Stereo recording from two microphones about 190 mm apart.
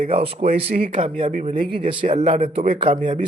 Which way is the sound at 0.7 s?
50° right (ahead or behind).